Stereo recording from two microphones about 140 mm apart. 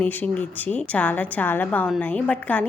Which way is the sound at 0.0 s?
10° left (ahead or behind).